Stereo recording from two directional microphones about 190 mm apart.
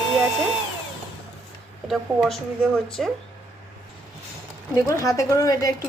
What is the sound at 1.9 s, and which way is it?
A woman's voice, centre (ahead or behind).